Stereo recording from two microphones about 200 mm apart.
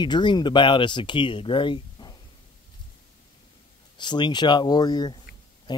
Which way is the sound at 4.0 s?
20° left (ahead or behind).